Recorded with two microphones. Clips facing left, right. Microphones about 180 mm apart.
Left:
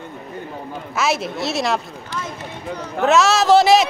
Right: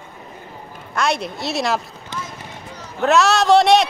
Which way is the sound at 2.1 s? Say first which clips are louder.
Left 2 dB; 20° right (ahead or behind).